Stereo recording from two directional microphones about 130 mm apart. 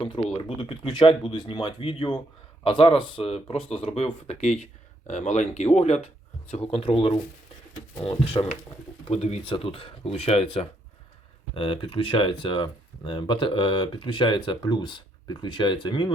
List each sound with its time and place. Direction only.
0.0 s speech: 40° left (ahead or behind)
8.0 s speech: 45° left (ahead or behind)